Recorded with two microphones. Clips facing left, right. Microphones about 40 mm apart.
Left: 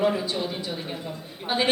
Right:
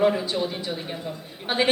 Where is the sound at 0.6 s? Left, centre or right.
Centre.